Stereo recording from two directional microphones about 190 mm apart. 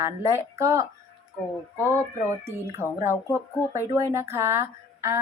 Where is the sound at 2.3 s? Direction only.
15° right (ahead or behind).